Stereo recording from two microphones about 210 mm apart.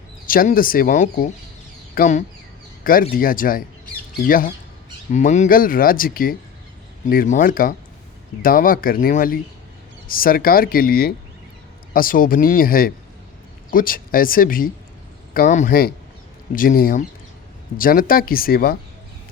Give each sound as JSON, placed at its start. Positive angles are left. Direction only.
{"t": 0.3, "sound": "speech", "side_deg": 40}